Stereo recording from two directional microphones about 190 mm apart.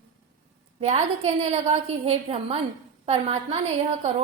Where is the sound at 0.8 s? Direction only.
35° right (ahead or behind).